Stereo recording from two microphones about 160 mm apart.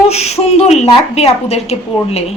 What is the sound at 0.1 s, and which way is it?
A woman's voice, 40° left (ahead or behind).